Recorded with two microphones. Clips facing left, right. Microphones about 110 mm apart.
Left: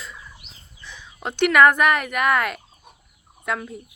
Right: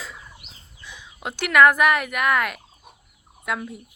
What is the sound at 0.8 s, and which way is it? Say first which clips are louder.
Speech: left 1 dB; 15° right (ahead or behind).